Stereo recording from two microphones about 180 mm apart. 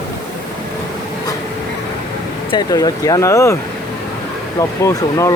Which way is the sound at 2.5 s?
20° left (ahead or behind).